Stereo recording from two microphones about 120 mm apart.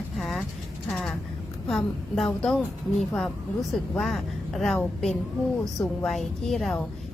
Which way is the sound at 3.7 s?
Centre (ahead or behind).